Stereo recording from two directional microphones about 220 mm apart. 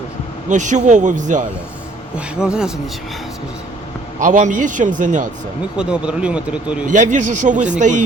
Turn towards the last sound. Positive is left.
turn(degrees=-35)  # may be behind; listen again after turning